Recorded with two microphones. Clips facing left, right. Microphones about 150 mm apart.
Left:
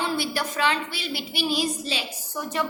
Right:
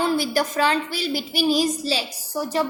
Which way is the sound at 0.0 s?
40° right (ahead or behind).